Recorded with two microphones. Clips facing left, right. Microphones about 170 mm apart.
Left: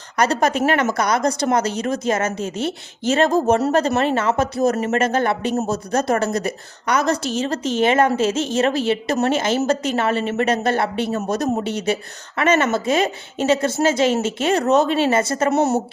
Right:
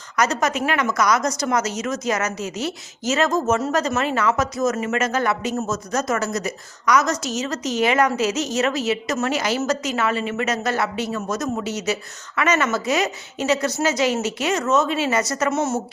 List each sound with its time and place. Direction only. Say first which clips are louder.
0.2 s a woman's voice: left 3 dB; 30° left (ahead or behind)